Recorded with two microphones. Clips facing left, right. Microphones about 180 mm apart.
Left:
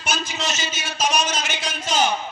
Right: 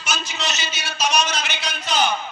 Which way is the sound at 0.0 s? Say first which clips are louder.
Left 1 dB; 50° left (ahead or behind).